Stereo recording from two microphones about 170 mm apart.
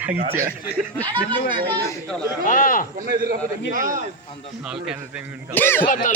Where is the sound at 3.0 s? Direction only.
60° right (ahead or behind).